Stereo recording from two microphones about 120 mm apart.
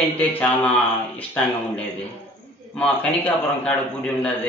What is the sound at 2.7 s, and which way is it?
A man's voice, 10° left (ahead or behind).